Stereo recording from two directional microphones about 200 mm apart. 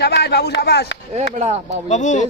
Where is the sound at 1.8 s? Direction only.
35° left (ahead or behind).